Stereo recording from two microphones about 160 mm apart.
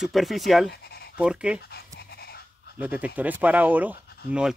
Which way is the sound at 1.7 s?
80° left.